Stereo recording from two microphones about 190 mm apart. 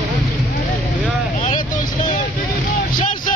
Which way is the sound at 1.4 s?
40° left (ahead or behind).